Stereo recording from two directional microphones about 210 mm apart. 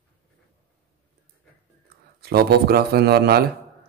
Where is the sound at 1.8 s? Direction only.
50° right (ahead or behind).